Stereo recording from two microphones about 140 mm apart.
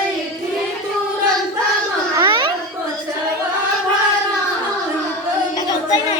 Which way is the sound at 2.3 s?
35° right (ahead or behind).